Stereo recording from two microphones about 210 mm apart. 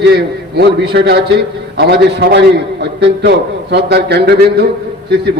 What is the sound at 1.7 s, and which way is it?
A man's voice, 50° right (ahead or behind).